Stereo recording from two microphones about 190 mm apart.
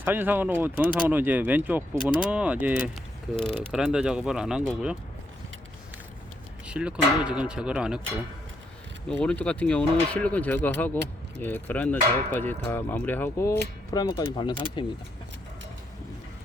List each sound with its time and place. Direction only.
0.0 s speech: 10° right (ahead or behind)
6.7 s speech: 5° right (ahead or behind)
9.0 s speech: 5° left (ahead or behind); by 14.8 s 25° left (ahead or behind)